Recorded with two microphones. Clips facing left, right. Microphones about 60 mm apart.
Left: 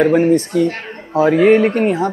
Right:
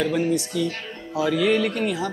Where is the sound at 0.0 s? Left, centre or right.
Left.